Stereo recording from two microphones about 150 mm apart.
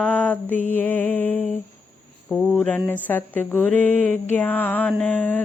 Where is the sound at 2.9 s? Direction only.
10° left (ahead or behind).